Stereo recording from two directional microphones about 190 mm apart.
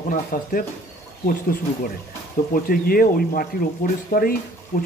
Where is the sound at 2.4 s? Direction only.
40° left (ahead or behind).